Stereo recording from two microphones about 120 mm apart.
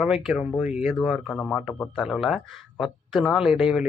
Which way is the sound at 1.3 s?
15° left (ahead or behind).